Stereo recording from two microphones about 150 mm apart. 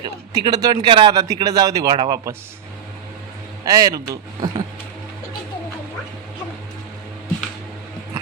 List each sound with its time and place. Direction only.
0.0 s speech: 30° right (ahead or behind)
3.7 s speech: 25° right (ahead or behind)